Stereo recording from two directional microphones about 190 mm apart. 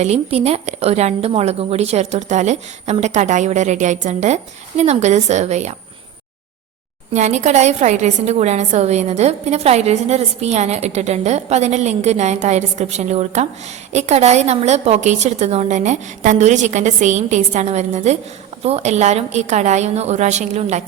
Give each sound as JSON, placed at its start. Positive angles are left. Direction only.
{"t": 0.0, "sound": "a woman's voice", "side_deg": -35}
{"t": 7.1, "sound": "a woman's voice", "side_deg": -40}